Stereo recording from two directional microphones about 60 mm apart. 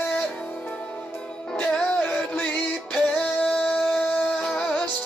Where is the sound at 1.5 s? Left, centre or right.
Centre.